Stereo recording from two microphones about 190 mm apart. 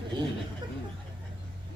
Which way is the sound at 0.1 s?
25° right (ahead or behind).